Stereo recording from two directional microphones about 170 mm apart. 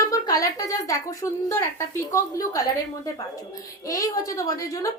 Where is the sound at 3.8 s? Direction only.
20° left (ahead or behind).